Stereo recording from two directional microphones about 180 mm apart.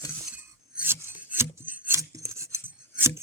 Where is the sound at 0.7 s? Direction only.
10° right (ahead or behind).